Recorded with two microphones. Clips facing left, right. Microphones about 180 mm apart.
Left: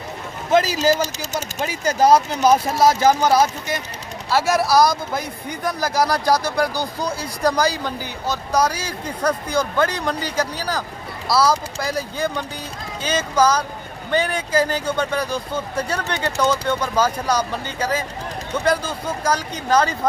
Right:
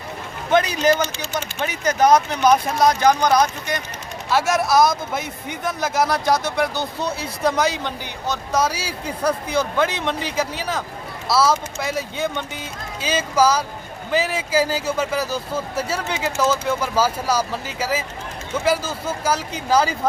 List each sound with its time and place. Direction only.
1.0 s speech: 40° left (ahead or behind)
2.7 s speech: 5° left (ahead or behind)